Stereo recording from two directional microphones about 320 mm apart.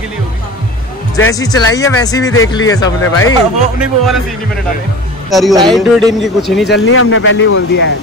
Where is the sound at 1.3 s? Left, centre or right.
Centre.